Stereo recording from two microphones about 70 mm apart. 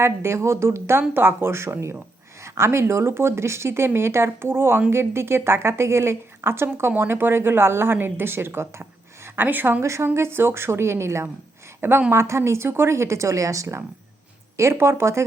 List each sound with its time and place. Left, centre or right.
0.0 s a woman's voice: right
9.8 s a woman's voice: right